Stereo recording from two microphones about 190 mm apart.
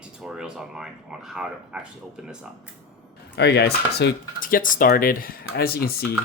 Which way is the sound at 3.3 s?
60° left (ahead or behind).